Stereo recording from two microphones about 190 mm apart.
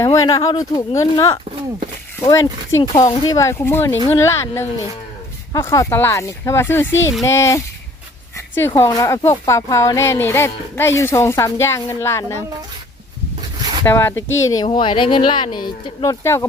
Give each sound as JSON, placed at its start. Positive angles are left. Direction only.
{"t": 0.0, "sound": "speech", "side_deg": 15}
{"t": 13.8, "sound": "speech", "side_deg": 10}